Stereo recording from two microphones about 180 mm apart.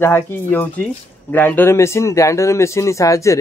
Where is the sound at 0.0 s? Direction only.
10° left (ahead or behind).